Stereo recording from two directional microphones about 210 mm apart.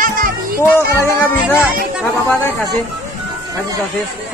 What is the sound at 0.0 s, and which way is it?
Music, 40° right (ahead or behind).